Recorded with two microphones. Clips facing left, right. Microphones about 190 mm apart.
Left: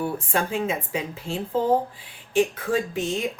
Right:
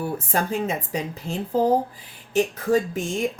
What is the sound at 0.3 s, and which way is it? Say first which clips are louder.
Speech: right 2 dB; 40° right (ahead or behind).